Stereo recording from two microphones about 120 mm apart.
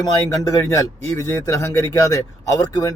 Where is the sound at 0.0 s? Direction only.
30° left (ahead or behind).